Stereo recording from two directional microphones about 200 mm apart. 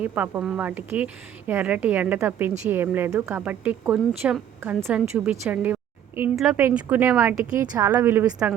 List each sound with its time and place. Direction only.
0.0 s a woman's voice: 10° right (ahead or behind)